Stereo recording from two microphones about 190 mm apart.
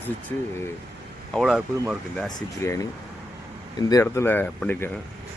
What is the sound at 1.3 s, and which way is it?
Speech, centre (ahead or behind).